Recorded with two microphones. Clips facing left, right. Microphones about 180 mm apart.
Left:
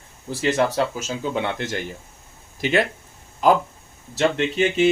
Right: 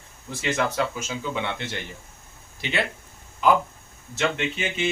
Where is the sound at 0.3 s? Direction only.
40° left (ahead or behind).